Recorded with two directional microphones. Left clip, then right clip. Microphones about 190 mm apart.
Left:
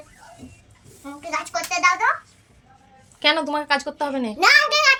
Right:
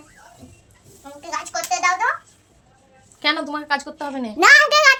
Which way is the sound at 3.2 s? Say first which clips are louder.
Left 2 dB; 10° left (ahead or behind).